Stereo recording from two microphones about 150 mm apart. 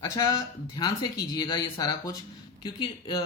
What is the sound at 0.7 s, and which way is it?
Speech, 30° left (ahead or behind).